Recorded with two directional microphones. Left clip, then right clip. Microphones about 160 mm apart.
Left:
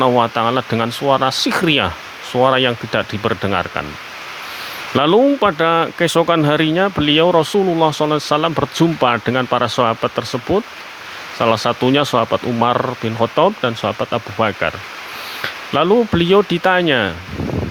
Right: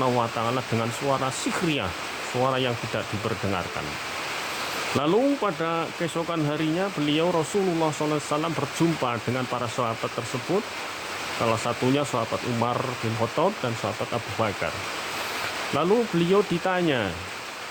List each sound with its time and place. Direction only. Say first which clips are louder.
0.0 s speech: left 10 dB; 60° left (ahead or behind)
4.9 s speech: left 11 dB; 60° left (ahead or behind)
7.5 s speech: left 10 dB; 45° left (ahead or behind)
8.0 s speech: left 10 dB; 60° left (ahead or behind)
11.4 s speech: left 11 dB; 45° left (ahead or behind)
11.9 s speech: left 11 dB; 60° left (ahead or behind)
15.7 s speech: left 10 dB; 55° left (ahead or behind)